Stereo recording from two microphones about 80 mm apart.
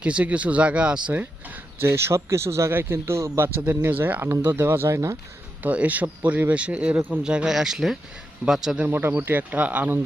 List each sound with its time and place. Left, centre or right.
0.0 s speech: centre
1.9 s a man's voice: right
5.6 s speech: centre
8.9 s speech: right